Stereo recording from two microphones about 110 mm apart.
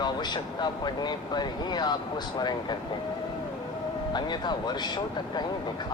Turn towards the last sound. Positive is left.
turn(degrees=40)  # may be behind; listen again after turning